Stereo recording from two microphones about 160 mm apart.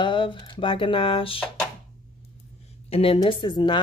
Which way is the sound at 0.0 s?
30° left (ahead or behind).